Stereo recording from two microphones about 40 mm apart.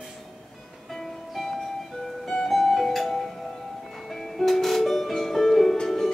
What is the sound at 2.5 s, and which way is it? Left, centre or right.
Music, centre.